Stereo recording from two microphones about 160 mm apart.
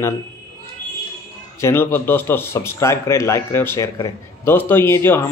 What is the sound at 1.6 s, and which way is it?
A man's voice, 15° left (ahead or behind).